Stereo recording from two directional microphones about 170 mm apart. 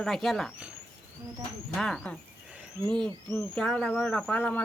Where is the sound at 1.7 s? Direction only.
5° left (ahead or behind).